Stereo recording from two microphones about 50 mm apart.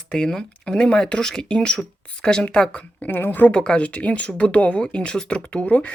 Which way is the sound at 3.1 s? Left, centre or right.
Left.